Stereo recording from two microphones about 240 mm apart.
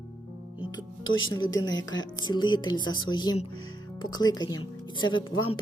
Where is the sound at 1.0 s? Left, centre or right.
Left.